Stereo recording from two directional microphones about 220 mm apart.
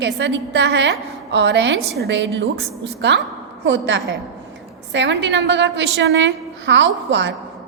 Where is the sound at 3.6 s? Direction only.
55° right (ahead or behind).